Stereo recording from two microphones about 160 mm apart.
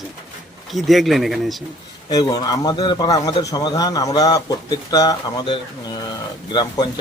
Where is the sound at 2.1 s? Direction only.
25° left (ahead or behind).